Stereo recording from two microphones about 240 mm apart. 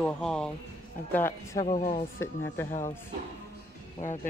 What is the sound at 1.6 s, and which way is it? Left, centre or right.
Speech, left.